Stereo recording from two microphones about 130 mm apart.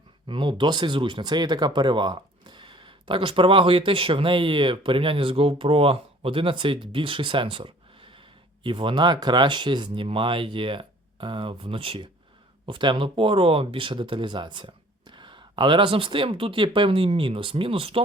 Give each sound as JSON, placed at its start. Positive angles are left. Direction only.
{"t": 0.3, "sound": "speech", "side_deg": -40}